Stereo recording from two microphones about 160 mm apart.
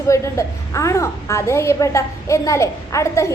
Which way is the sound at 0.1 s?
20° left (ahead or behind).